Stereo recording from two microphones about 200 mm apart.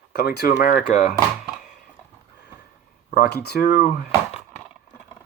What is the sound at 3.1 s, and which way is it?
Speech, 55° left (ahead or behind).